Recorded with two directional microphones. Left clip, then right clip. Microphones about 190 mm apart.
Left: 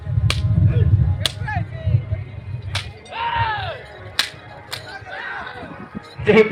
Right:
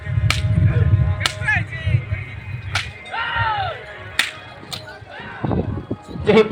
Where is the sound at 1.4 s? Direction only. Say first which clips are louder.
Right 8 dB; 30° left (ahead or behind).